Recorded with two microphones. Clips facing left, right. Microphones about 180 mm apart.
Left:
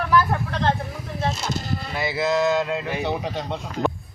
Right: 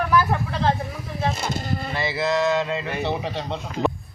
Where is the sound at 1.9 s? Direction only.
Centre (ahead or behind).